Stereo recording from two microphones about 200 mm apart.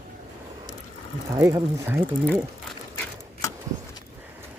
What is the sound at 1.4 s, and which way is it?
Speech, 15° right (ahead or behind).